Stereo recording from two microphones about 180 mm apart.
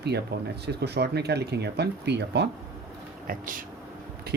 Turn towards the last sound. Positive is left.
turn(degrees=-50)  # may be behind; listen again after turning